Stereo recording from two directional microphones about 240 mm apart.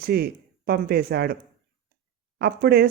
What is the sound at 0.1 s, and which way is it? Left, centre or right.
Speech, right.